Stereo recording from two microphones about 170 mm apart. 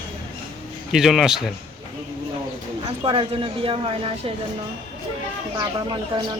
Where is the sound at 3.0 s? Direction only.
30° right (ahead or behind).